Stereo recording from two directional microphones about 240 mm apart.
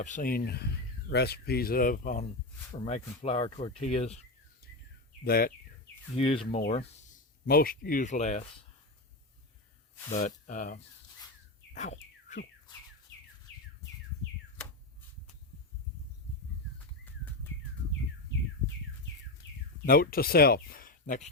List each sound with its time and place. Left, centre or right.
0.0 s speech: left
5.2 s speech: left
6.1 s speech: left
7.4 s speech: left
10.1 s speech: left
11.7 s bird: left
19.4 s bird: left
19.8 s speech: left